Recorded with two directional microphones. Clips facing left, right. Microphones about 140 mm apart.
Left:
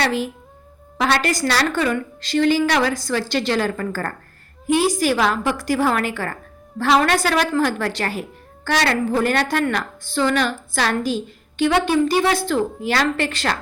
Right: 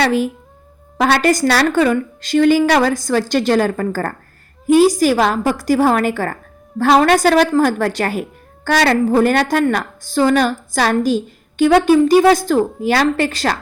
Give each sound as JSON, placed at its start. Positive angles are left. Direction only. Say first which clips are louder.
{"t": 0.9, "sound": "a woman's voice", "louder": "right 6 dB", "side_deg": -45}